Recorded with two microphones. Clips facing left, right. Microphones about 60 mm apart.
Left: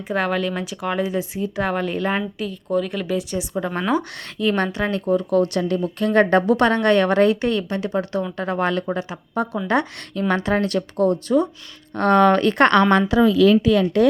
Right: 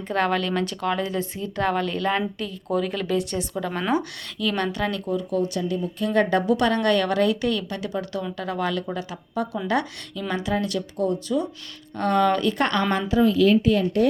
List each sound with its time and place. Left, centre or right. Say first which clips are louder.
0.1 s speech: left 1 dB; centre
2.4 s speech: left 3 dB; centre
4.4 s speech: left 4 dB; left
5.3 s speech: left 5 dB; left
10.2 s speech: left 5 dB; left
13.6 s speech: left 3 dB; left